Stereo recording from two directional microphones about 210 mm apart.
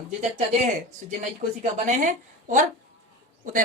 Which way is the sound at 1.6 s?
35° right (ahead or behind).